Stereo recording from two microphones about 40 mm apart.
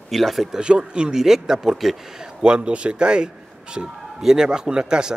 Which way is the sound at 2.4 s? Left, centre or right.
Right.